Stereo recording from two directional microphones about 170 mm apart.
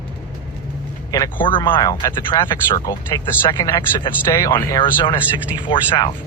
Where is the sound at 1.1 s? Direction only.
25° left (ahead or behind).